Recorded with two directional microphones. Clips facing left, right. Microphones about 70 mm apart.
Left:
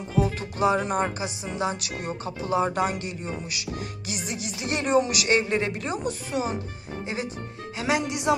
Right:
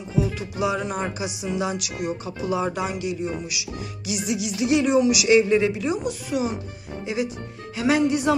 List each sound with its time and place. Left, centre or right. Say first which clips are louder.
0.2 s music: left 1 dB; left
7.7 s speech: right 6 dB; left